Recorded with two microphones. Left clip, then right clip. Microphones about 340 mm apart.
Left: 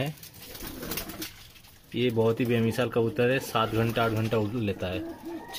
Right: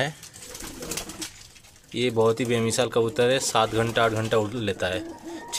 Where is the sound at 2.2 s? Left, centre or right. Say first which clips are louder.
Right 4 dB; right.